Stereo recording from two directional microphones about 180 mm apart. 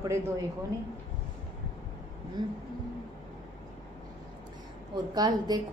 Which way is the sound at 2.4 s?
25° right (ahead or behind).